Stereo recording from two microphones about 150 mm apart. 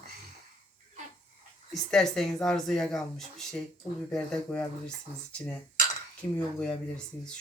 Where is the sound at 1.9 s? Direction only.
5° left (ahead or behind).